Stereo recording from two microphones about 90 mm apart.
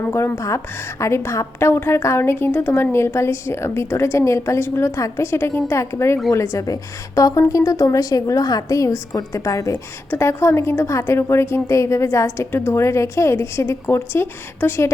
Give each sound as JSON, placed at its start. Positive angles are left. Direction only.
{"t": 0.3, "sound": "speech", "side_deg": 35}